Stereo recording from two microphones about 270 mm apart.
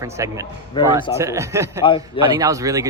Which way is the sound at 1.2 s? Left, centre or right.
Centre.